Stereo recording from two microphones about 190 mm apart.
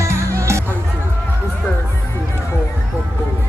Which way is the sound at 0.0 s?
15° right (ahead or behind).